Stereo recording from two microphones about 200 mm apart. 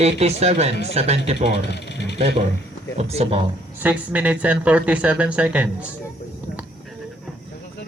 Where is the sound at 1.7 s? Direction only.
60° left (ahead or behind).